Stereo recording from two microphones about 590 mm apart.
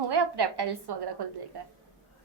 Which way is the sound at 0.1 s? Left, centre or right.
Right.